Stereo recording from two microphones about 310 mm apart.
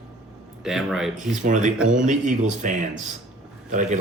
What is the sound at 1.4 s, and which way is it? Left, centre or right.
Speech, right.